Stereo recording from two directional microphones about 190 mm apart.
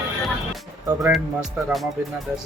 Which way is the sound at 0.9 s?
10° right (ahead or behind).